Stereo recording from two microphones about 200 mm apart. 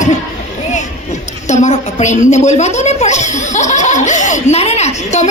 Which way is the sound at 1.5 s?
35° left (ahead or behind).